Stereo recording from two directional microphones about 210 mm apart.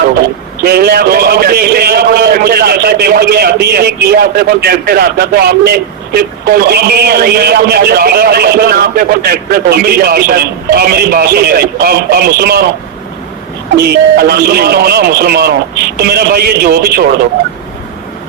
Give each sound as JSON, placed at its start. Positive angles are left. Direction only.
{"t": 0.6, "sound": "speech", "side_deg": -50}
{"t": 13.7, "sound": "speech", "side_deg": -50}